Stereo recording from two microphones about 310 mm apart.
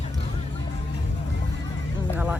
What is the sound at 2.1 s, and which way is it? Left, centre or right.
Vehicle, centre.